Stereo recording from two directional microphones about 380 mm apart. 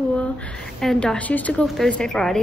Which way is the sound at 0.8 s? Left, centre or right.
Centre.